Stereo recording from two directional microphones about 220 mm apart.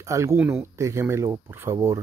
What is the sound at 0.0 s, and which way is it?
Speech, 15° right (ahead or behind).